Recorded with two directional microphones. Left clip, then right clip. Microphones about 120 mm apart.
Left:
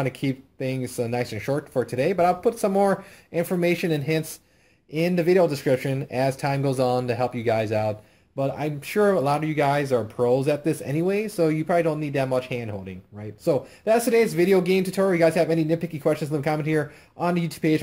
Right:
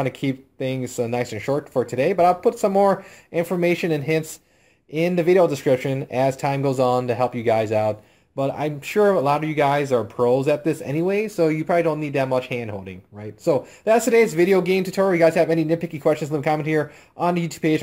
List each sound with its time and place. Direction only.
0.0 s speech: 20° right (ahead or behind)